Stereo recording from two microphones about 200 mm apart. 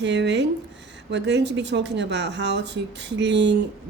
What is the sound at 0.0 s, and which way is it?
Speech, 60° right (ahead or behind).